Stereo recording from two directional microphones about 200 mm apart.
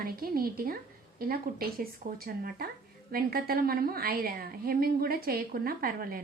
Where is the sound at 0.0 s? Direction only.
50° right (ahead or behind).